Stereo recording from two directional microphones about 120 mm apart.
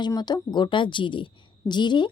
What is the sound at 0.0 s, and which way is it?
Speech, 35° left (ahead or behind).